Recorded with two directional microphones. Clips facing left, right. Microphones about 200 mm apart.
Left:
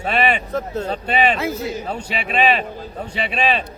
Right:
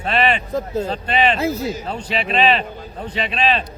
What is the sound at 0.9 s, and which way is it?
Speech, 5° left (ahead or behind).